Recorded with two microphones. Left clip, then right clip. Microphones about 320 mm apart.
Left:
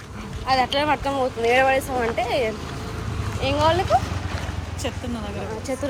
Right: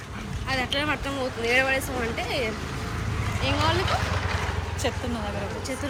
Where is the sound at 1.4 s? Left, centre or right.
Centre.